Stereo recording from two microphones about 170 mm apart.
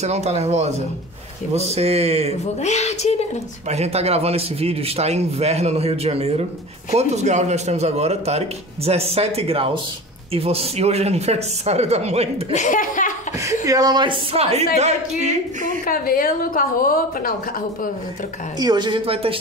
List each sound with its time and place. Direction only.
0.0 s a man's voice: 40° right (ahead or behind)
2.4 s a woman's voice: 40° left (ahead or behind)
3.7 s a man's voice: 40° right (ahead or behind)
12.5 s speech: 50° left (ahead or behind)
13.5 s speech: 20° right (ahead or behind); by 15.8 s 45° right (ahead or behind)
15.8 s a woman's voice: 55° left (ahead or behind)
18.6 s speech: 25° right (ahead or behind)